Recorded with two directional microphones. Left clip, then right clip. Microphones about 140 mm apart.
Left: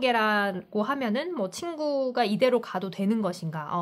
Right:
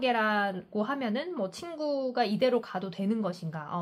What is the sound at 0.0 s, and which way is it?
A woman's voice, 35° left (ahead or behind).